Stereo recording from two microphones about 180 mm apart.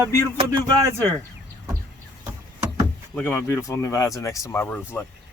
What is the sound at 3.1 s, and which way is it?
Speech, 10° left (ahead or behind).